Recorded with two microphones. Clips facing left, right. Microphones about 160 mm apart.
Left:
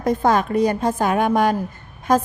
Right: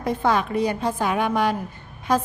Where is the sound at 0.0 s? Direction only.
40° left (ahead or behind).